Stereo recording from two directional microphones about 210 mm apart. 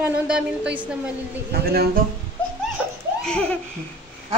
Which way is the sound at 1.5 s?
50° right (ahead or behind).